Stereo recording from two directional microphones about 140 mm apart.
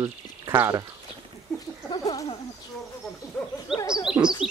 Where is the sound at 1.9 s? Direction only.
30° left (ahead or behind).